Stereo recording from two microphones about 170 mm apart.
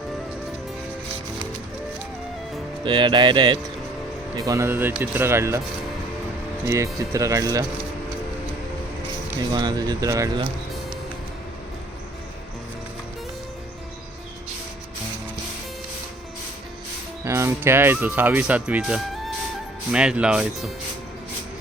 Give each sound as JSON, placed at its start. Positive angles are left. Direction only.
{"t": 2.8, "sound": "speech", "side_deg": -25}
{"t": 6.7, "sound": "speech", "side_deg": -15}
{"t": 9.5, "sound": "speech", "side_deg": -25}
{"t": 17.2, "sound": "speech", "side_deg": -15}